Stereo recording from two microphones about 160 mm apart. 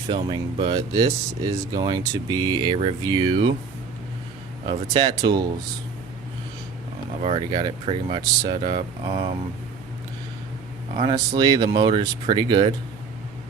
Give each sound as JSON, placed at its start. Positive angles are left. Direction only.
{"t": 0.1, "sound": "speech", "side_deg": -30}
{"t": 0.8, "sound": "speech", "side_deg": -20}
{"t": 4.6, "sound": "speech", "side_deg": -30}
{"t": 7.2, "sound": "speech", "side_deg": -40}
{"t": 11.1, "sound": "speech", "side_deg": -25}